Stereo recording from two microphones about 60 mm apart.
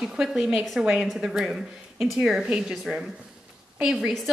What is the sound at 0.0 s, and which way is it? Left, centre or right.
A woman's voice, centre.